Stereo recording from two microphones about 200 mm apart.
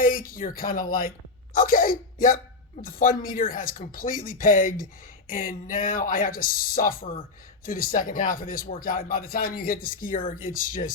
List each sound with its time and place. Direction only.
0.0 s speech: 45° left (ahead or behind)